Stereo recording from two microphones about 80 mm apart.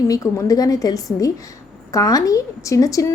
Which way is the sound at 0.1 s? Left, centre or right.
Left.